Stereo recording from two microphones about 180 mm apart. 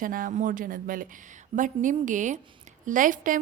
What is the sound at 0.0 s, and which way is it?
A woman's voice, 50° right (ahead or behind).